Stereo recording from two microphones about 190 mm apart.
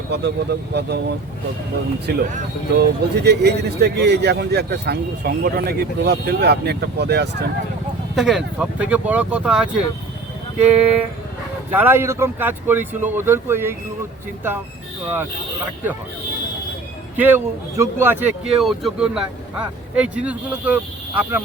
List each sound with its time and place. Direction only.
0.1 s a man's voice: 65° right (ahead or behind)
2.1 s a man's voice: 60° right (ahead or behind)
8.1 s speech: centre (ahead or behind)
17.2 s speech: 10° right (ahead or behind)
20.2 s speech: 10° right (ahead or behind)